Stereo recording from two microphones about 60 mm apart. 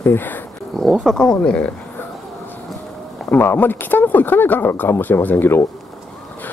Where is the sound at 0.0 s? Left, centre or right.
Left.